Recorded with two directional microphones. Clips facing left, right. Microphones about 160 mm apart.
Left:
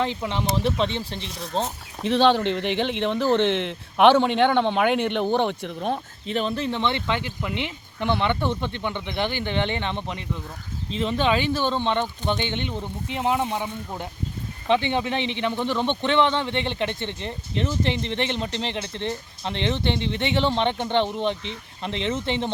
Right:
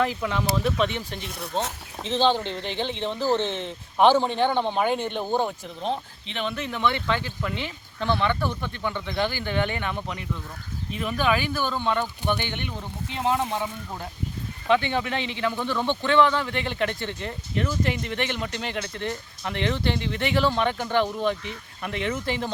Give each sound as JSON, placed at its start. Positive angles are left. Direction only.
{"t": 0.0, "sound": "speech", "side_deg": 25}
{"t": 2.0, "sound": "speech", "side_deg": 60}